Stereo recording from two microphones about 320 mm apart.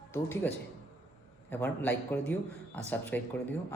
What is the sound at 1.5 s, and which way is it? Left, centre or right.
A man's voice, centre.